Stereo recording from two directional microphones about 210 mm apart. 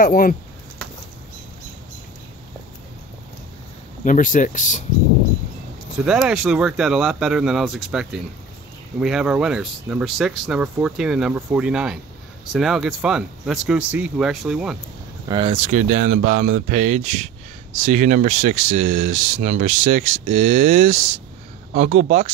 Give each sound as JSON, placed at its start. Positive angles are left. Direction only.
{"t": 0.0, "sound": "speech", "side_deg": 40}
{"t": 4.0, "sound": "speech", "side_deg": 40}
{"t": 6.0, "sound": "speech", "side_deg": -5}
{"t": 15.2, "sound": "speech", "side_deg": -20}